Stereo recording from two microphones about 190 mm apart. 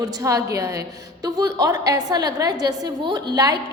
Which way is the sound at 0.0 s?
15° right (ahead or behind).